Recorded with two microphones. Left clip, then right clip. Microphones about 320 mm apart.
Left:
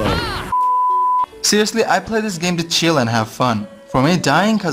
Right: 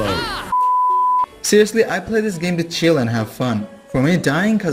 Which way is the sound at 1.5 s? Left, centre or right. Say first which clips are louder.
Right 2 dB; centre.